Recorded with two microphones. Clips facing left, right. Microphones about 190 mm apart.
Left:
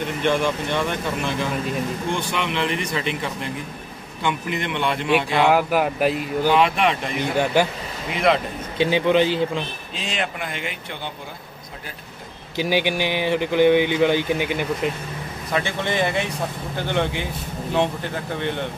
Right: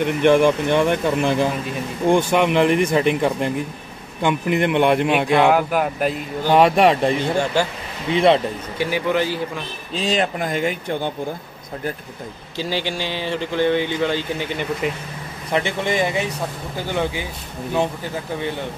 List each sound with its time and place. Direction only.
0.2 s speech: 50° right (ahead or behind)
5.5 s speech: 5° left (ahead or behind)
6.5 s speech: 40° right (ahead or behind)
7.2 s speech: 15° left (ahead or behind)
8.1 s a man's voice: 30° right (ahead or behind)
8.7 s a man's voice: 20° left (ahead or behind)
9.9 s speech: 35° right (ahead or behind)
12.5 s speech: 15° left (ahead or behind)
15.5 s speech: 15° right (ahead or behind)